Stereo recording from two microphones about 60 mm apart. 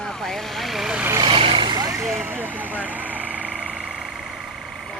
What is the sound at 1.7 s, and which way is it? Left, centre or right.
Vehicle, right.